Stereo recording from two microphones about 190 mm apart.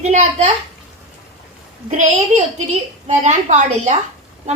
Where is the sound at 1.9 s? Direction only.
40° right (ahead or behind).